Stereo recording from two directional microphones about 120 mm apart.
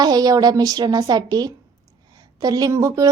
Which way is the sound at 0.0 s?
35° right (ahead or behind).